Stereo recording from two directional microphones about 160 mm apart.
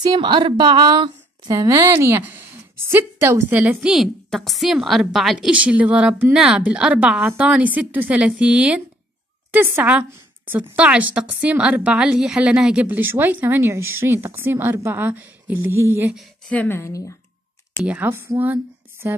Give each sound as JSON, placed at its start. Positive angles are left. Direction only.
{"t": 0.0, "sound": "a woman's voice", "side_deg": -30}
{"t": 16.2, "sound": "speech", "side_deg": 5}
{"t": 17.8, "sound": "speech", "side_deg": -10}